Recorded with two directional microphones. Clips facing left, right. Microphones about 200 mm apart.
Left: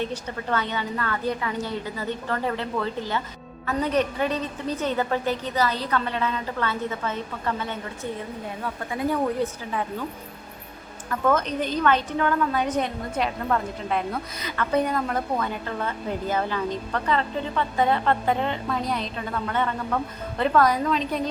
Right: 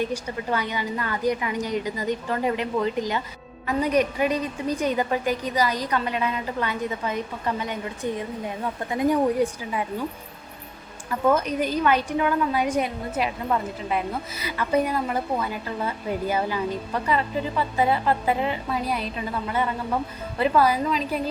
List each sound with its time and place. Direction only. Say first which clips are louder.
0.0 s a woman's voice: right 2 dB; 10° right (ahead or behind)
11.1 s a woman's voice: right 1 dB; 10° right (ahead or behind)